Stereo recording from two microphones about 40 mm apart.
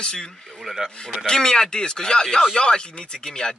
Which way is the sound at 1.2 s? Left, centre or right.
Centre.